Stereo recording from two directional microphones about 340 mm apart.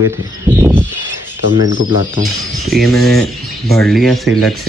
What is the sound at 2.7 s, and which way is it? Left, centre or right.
Speech, centre.